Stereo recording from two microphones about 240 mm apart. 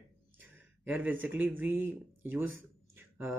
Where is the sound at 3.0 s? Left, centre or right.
Centre.